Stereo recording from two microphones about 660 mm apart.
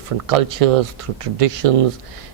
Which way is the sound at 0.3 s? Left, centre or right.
Right.